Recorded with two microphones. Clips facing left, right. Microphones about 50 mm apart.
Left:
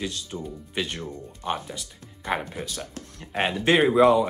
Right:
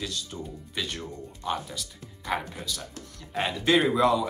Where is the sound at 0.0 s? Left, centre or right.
Left.